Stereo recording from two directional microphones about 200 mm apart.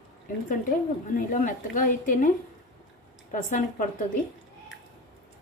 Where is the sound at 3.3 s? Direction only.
40° left (ahead or behind).